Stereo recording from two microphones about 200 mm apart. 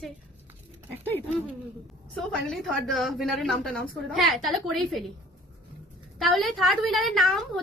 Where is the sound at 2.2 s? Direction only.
Centre (ahead or behind).